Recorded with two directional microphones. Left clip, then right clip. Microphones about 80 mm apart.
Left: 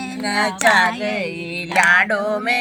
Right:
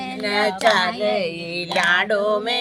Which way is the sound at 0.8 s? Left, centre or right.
Right.